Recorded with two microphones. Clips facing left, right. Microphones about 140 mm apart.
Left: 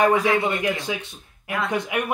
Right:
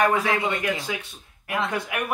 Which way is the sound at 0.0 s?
20° left (ahead or behind).